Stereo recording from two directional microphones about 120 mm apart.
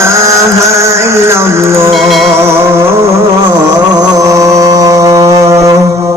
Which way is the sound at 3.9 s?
30° right (ahead or behind).